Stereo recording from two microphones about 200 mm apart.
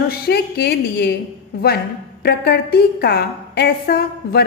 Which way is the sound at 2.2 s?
55° left (ahead or behind).